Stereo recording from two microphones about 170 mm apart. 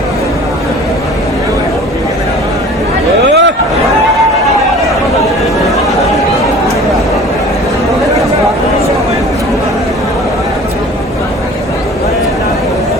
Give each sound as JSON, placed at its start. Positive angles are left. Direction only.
{"t": 3.2, "sound": "chatter", "side_deg": -90}